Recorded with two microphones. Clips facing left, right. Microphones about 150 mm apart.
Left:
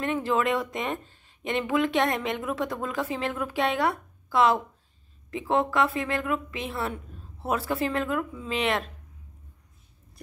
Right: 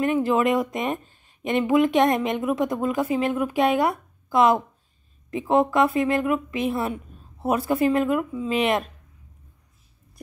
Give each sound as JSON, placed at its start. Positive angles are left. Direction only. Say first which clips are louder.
{"t": 0.0, "sound": "speech", "louder": "right 5 dB", "side_deg": -15}